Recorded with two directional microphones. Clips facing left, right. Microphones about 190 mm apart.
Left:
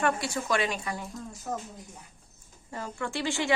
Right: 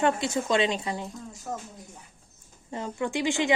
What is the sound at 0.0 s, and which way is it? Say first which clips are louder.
A woman's voice: right 3 dB; 20° right (ahead or behind).